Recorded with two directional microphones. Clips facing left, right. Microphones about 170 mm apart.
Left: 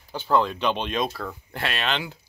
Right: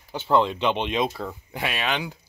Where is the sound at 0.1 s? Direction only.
20° right (ahead or behind).